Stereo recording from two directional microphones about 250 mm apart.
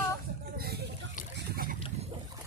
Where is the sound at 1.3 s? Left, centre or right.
Right.